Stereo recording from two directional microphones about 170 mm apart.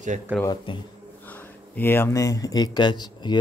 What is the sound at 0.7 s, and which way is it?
Speech, 30° left (ahead or behind).